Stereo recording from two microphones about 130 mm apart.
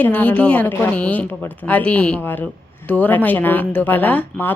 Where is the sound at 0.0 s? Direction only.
10° left (ahead or behind).